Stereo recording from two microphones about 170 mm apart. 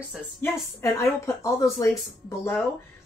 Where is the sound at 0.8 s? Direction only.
15° left (ahead or behind).